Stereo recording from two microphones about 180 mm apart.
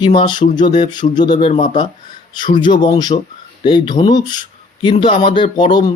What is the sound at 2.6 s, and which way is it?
Speech, 25° left (ahead or behind).